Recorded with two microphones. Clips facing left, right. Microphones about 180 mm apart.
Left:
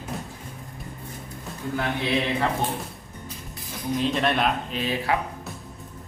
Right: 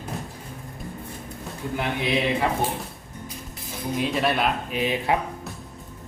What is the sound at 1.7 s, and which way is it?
Speech, 15° right (ahead or behind).